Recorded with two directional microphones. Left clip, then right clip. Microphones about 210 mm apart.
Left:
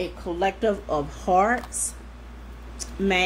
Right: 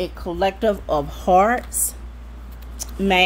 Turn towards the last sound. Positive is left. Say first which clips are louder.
# right 4 dB
turn(degrees=-40)  # may be behind; listen again after turning